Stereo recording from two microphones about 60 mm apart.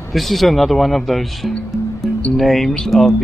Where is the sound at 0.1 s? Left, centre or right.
Centre.